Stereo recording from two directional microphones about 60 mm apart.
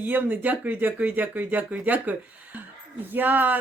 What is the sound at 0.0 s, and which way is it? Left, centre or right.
Speech, right.